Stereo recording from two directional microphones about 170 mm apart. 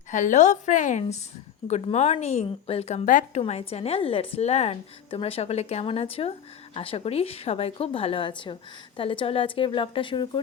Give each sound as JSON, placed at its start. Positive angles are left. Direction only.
{"t": 0.1, "sound": "a woman's voice", "side_deg": 45}
{"t": 3.4, "sound": "a woman's voice", "side_deg": 35}